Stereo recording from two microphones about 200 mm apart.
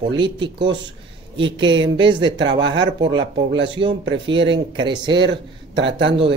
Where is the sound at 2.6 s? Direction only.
65° right (ahead or behind).